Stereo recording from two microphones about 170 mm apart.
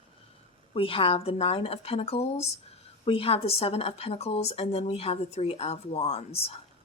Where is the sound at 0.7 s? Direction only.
35° left (ahead or behind).